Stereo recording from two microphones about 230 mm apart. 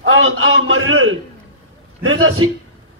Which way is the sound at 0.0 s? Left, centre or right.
Right.